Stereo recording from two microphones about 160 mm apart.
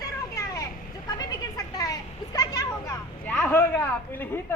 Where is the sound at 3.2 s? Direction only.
10° left (ahead or behind).